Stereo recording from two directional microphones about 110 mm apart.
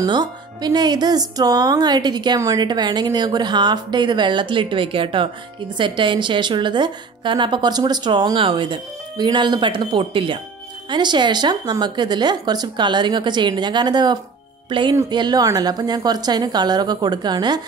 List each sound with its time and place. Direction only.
0.0 s a woman's voice: 40° right (ahead or behind)